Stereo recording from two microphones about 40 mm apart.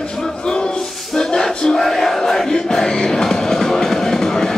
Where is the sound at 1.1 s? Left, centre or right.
Centre.